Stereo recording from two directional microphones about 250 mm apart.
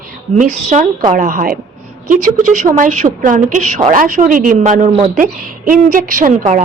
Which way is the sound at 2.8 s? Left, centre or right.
Right.